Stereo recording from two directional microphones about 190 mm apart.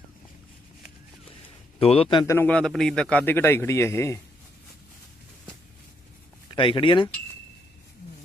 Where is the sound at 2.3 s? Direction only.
5° left (ahead or behind).